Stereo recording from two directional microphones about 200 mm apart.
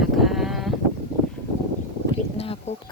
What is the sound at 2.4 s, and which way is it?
Speech, 30° left (ahead or behind).